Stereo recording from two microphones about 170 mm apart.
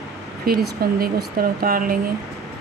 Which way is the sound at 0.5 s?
65° right (ahead or behind).